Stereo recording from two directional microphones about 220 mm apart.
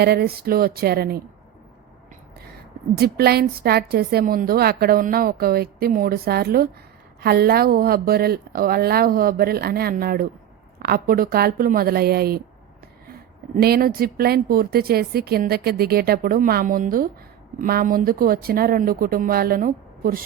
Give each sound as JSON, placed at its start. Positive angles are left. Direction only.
{"t": 0.0, "sound": "a woman's voice", "side_deg": -45}
{"t": 3.0, "sound": "a woman's voice", "side_deg": -45}
{"t": 13.6, "sound": "a woman's voice", "side_deg": -45}